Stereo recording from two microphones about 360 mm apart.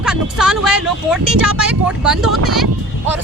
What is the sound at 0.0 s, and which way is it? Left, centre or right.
Speech, centre.